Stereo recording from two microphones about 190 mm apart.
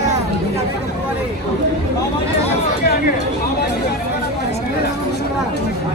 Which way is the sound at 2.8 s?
55° left (ahead or behind).